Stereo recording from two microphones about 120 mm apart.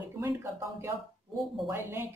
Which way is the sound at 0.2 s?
20° right (ahead or behind).